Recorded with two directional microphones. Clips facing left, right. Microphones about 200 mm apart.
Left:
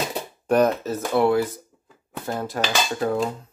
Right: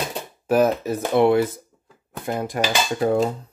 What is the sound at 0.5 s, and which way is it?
Speech, 5° right (ahead or behind).